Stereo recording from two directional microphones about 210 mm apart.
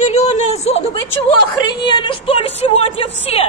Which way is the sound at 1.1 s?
20° left (ahead or behind).